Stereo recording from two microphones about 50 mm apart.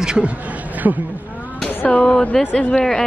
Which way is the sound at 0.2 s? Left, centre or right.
Right.